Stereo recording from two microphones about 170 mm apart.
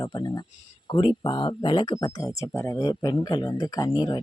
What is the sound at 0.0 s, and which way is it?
Speech, 25° left (ahead or behind).